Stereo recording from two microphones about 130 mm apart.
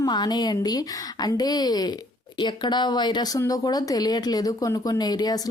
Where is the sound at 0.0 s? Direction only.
30° left (ahead or behind).